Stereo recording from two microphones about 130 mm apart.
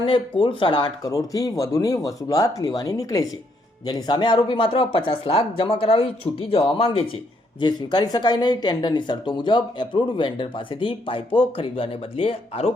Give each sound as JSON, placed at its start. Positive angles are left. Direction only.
{"t": 0.0, "sound": "speech", "side_deg": 40}
{"t": 7.6, "sound": "speech", "side_deg": 35}